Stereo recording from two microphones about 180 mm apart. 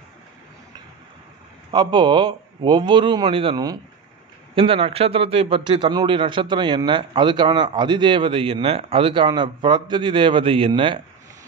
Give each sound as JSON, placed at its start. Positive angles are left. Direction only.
{"t": 1.7, "sound": "a man's voice", "side_deg": -25}